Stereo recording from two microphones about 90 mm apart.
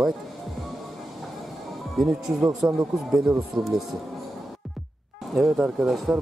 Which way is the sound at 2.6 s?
25° right (ahead or behind).